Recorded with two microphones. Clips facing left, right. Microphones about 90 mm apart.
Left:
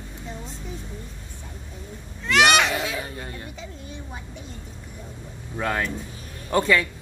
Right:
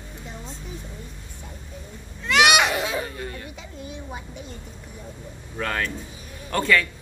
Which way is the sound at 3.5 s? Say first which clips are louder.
Right 1 dB; 5° right (ahead or behind).